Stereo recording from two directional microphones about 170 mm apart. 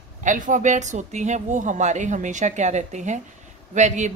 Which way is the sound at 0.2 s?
50° right (ahead or behind).